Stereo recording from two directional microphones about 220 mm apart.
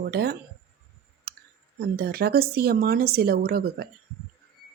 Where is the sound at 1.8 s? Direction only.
45° right (ahead or behind).